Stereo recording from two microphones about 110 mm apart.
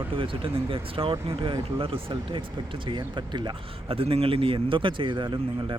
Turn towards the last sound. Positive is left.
turn(degrees=-45)  # may be behind; listen again after turning